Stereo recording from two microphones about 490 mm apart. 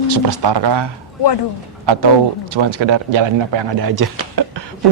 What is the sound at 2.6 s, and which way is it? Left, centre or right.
Speech, right.